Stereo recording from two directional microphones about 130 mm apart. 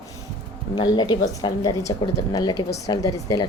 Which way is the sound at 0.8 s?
35° left (ahead or behind).